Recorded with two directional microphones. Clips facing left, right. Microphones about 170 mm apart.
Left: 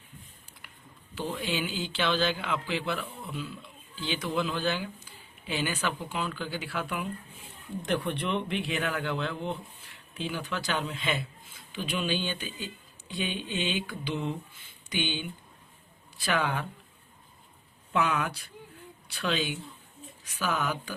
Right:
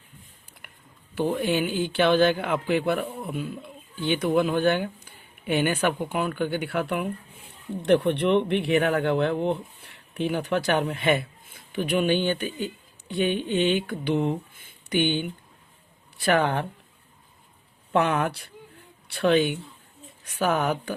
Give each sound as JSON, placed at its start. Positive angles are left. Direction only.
{"t": 0.6, "sound": "a sound", "side_deg": -55}
{"t": 1.1, "sound": "speech", "side_deg": -55}
{"t": 17.9, "sound": "speech", "side_deg": -55}